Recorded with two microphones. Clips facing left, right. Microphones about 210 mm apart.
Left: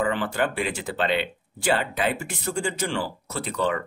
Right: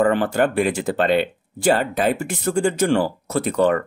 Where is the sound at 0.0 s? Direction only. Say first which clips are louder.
Right 7 dB; 50° right (ahead or behind).